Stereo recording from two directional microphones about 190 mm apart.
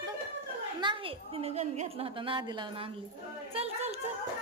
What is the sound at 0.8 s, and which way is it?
A woman's voice, 25° right (ahead or behind).